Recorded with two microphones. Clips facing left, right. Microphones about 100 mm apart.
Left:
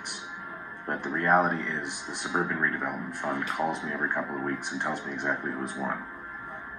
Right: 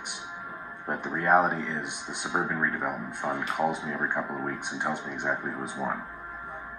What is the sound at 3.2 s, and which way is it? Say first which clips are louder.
Speech: right 1 dB; centre (ahead or behind).